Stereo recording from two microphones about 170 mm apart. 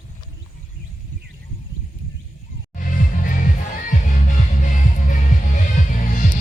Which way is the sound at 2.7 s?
50° left (ahead or behind).